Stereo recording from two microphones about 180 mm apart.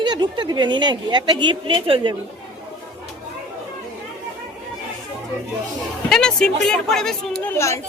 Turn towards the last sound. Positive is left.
turn(degrees=15)  # may be behind; listen again after turning